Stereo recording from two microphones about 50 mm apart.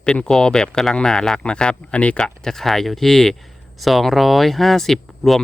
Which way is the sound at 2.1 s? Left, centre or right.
Centre.